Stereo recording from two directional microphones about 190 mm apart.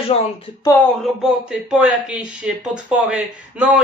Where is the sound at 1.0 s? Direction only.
5° right (ahead or behind).